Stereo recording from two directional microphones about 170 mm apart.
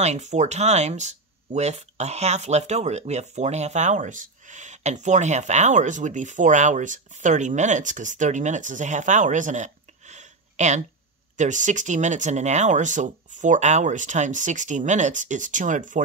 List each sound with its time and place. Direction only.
0.0 s speech: 40° right (ahead or behind)